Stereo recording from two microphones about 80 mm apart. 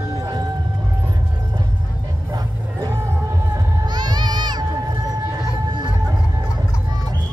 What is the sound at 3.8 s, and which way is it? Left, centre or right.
Music, right.